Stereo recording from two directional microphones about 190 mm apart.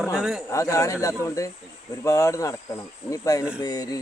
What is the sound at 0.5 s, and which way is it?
Speech, 15° left (ahead or behind).